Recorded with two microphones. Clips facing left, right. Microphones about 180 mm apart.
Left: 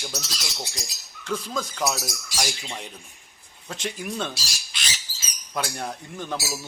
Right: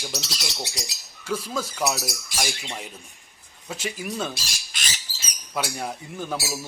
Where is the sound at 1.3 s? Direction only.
10° right (ahead or behind).